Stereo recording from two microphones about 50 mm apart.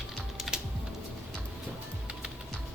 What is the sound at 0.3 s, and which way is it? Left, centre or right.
Typing, centre.